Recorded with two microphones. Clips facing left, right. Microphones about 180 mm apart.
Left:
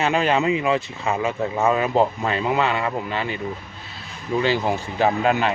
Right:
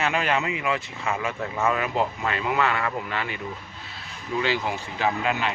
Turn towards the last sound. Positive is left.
turn(degrees=45)  # may be behind; listen again after turning